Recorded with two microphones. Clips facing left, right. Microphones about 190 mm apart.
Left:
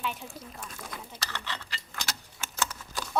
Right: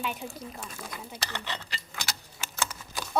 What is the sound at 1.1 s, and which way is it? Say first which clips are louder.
Speech: right 3 dB; 20° right (ahead or behind).